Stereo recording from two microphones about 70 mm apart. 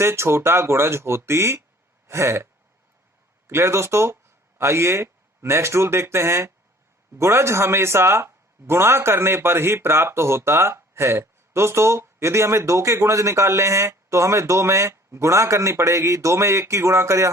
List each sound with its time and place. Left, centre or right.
0.0 s speech: right